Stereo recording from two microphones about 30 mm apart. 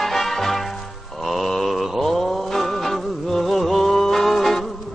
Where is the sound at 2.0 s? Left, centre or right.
Centre.